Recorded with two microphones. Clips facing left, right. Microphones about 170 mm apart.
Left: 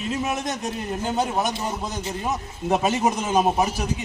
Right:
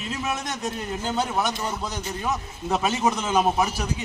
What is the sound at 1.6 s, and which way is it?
A man's voice, 20° left (ahead or behind).